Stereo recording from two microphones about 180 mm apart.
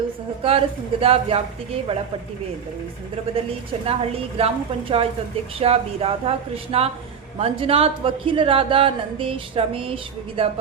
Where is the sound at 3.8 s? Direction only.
35° right (ahead or behind).